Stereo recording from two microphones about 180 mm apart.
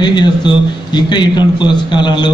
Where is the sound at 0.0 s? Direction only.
25° left (ahead or behind).